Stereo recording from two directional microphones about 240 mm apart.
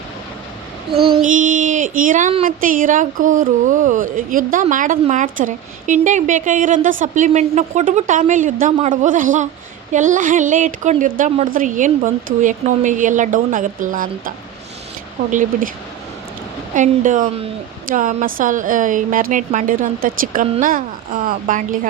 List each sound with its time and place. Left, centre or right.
1.0 s child singing: right
16.7 s child singing: right